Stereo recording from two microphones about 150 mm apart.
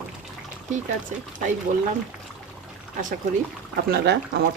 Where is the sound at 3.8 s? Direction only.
90° right.